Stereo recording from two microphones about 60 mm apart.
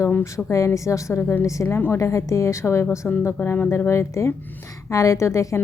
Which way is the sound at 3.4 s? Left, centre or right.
Left.